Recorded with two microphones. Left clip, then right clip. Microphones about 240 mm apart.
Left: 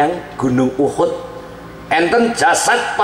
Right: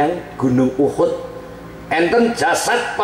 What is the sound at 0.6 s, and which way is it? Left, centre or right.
Speech, right.